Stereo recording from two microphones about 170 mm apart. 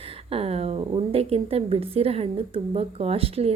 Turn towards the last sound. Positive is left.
turn(degrees=-35)  # may be behind; listen again after turning